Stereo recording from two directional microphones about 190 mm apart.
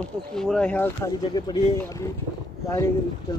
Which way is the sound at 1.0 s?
20° left (ahead or behind).